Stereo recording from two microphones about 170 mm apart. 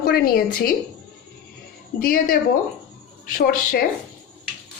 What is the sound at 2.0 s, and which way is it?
A woman's voice, 60° left (ahead or behind).